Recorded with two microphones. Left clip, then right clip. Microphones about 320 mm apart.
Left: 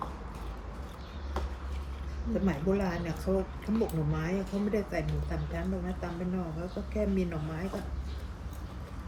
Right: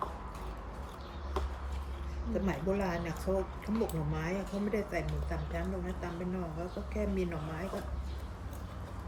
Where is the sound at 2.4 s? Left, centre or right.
Centre.